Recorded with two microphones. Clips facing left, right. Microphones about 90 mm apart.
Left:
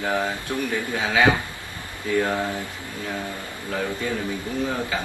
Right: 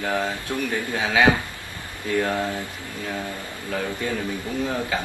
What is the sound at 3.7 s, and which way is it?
Speech, 15° left (ahead or behind).